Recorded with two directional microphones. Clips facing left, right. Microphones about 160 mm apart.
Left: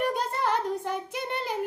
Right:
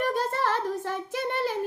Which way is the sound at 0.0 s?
15° left (ahead or behind).